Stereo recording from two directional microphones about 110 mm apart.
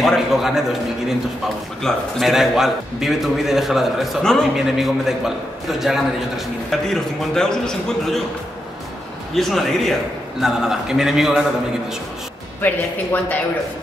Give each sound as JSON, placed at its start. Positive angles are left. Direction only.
{"t": 0.0, "sound": "a man's voice", "side_deg": 0}
{"t": 9.3, "sound": "a man's voice", "side_deg": 0}
{"t": 12.6, "sound": "speech", "side_deg": 15}